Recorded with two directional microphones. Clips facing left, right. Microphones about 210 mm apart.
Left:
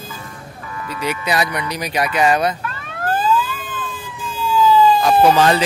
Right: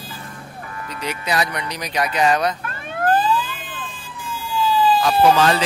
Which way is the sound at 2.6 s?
50° right (ahead or behind).